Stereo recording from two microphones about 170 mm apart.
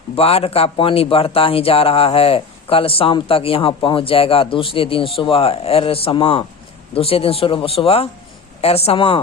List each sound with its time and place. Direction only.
0.2 s speech: 35° left (ahead or behind)